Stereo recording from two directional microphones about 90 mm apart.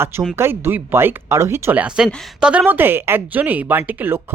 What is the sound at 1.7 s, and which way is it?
Speech, 15° right (ahead or behind).